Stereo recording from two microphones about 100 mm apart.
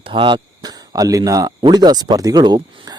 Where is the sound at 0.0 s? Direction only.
60° right (ahead or behind).